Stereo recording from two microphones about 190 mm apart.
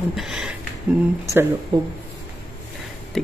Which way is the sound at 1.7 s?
20° right (ahead or behind).